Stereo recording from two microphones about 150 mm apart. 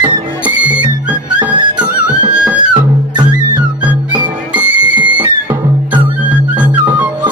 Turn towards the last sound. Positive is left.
turn(degrees=-10)  # may be behind; listen again after turning